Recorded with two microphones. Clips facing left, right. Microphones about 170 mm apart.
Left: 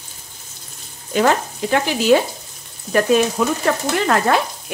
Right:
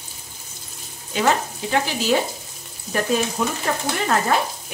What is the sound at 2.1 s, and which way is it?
Frying, 55° left (ahead or behind).